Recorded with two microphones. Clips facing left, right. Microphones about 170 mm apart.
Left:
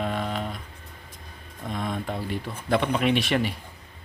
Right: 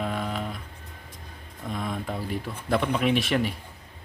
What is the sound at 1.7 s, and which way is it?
Speech, 5° right (ahead or behind).